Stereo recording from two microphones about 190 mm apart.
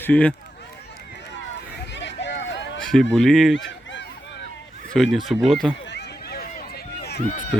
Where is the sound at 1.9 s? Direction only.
65° left (ahead or behind).